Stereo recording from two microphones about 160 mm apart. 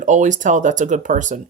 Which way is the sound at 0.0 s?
50° right (ahead or behind).